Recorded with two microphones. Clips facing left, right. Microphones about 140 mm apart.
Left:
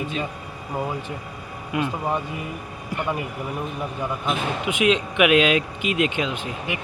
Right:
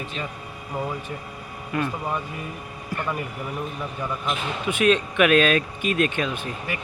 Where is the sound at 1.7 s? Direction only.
15° left (ahead or behind).